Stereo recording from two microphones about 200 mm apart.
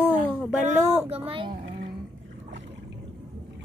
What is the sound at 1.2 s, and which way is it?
Speech, 25° right (ahead or behind).